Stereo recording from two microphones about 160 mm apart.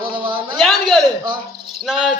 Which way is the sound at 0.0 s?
30° right (ahead or behind).